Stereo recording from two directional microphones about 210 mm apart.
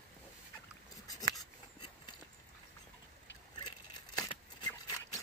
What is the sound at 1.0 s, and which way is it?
Scissors, 15° left (ahead or behind).